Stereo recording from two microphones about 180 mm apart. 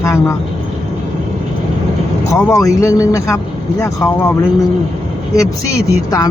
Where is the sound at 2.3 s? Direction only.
15° left (ahead or behind).